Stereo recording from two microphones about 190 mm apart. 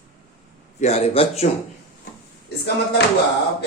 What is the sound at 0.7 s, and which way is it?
Speech, 35° left (ahead or behind).